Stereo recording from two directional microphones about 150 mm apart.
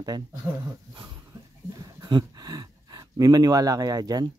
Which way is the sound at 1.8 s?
30° right (ahead or behind).